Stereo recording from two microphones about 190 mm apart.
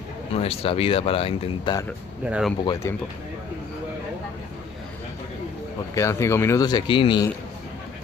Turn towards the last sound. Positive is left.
turn(degrees=25)  # may be behind; listen again after turning